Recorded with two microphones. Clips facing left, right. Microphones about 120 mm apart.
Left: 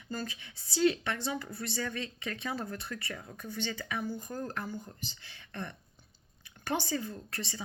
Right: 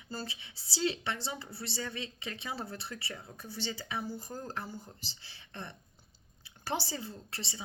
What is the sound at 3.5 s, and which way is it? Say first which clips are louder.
Speech: left 2 dB; 50° left (ahead or behind).